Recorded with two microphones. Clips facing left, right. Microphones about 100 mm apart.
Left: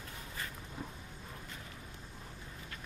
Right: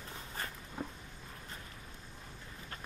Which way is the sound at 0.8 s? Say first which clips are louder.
Right 4 dB; 40° right (ahead or behind).